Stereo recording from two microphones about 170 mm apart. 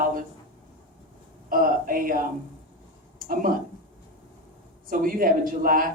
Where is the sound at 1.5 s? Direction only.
55° right (ahead or behind).